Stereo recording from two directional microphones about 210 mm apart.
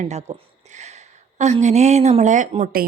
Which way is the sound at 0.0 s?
35° right (ahead or behind).